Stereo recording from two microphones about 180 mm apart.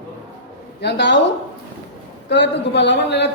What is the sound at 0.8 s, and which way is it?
Speech, 75° left (ahead or behind).